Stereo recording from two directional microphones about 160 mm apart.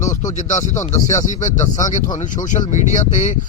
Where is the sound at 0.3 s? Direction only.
50° left (ahead or behind).